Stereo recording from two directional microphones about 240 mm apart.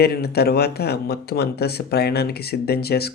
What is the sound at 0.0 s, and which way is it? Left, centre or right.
Speech, left.